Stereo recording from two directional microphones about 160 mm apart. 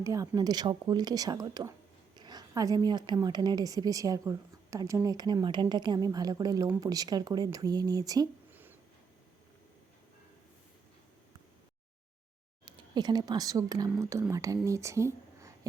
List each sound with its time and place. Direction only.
0.0 s a woman's voice: 20° right (ahead or behind)
12.6 s speech: 30° right (ahead or behind)